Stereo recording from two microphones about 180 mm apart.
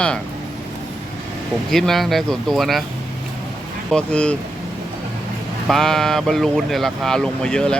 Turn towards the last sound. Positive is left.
turn(degrees=5)  # may be behind; listen again after turning